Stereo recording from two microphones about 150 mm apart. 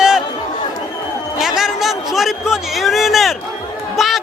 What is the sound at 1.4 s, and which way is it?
A man's voice, 5° right (ahead or behind).